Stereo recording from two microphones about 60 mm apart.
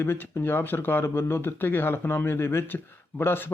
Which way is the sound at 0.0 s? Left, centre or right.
Left.